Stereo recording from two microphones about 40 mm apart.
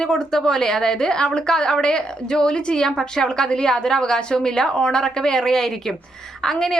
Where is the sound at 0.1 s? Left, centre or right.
Centre.